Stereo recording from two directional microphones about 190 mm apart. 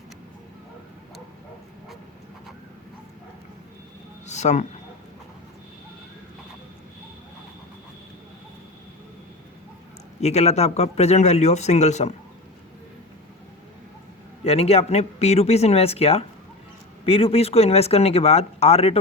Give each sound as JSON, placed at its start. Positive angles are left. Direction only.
{"t": 4.3, "sound": "a man's voice", "side_deg": 35}
{"t": 10.2, "sound": "speech", "side_deg": 35}
{"t": 14.4, "sound": "speech", "side_deg": 30}